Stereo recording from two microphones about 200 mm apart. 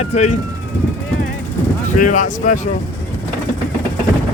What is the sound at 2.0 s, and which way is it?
Speech, 40° left (ahead or behind).